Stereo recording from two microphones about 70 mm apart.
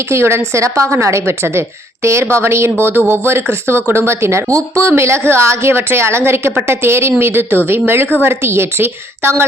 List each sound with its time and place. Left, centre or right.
0.1 s speech: right